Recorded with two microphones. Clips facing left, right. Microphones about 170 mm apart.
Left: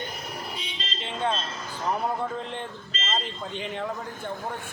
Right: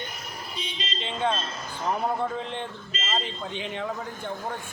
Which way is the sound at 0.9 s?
Centre (ahead or behind).